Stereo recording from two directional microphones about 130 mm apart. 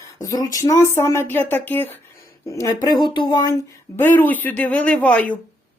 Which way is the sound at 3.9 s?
15° left (ahead or behind).